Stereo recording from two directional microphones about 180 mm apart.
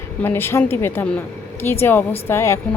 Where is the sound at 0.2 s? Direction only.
10° left (ahead or behind).